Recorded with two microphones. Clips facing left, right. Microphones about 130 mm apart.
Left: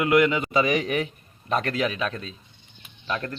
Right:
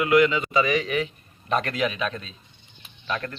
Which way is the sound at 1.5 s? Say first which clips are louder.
Even; 30° left (ahead or behind).